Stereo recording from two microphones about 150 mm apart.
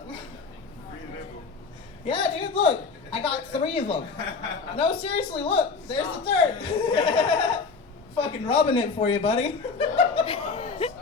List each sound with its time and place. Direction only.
2.0 s a woman's voice: 35° left (ahead or behind)
8.1 s chuckle: 35° left (ahead or behind)